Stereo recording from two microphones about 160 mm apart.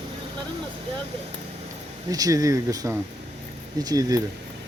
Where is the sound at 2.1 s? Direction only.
20° right (ahead or behind).